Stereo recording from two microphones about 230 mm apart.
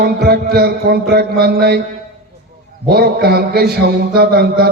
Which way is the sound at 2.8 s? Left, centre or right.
Right.